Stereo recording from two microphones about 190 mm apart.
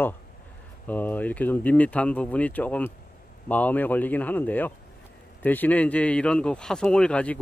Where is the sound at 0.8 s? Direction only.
10° left (ahead or behind).